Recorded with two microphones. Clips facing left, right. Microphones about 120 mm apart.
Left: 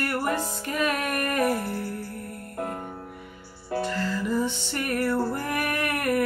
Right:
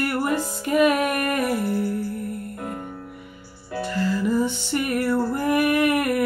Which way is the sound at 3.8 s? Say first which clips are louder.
Right 5 dB; 10° right (ahead or behind).